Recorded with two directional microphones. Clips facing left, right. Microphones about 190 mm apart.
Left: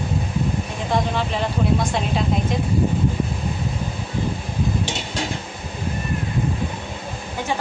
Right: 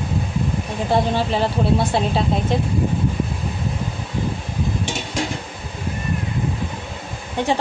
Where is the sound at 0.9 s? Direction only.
30° right (ahead or behind).